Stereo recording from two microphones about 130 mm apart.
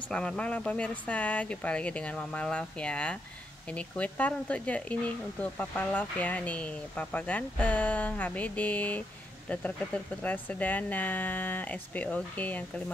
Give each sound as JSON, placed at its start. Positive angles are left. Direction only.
{"t": 0.1, "sound": "speech", "side_deg": 5}